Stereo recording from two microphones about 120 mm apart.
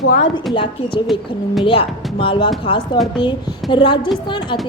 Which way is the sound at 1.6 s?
45° left (ahead or behind).